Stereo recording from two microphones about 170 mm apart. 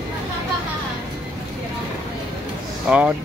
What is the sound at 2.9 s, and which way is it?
Speech, 5° right (ahead or behind).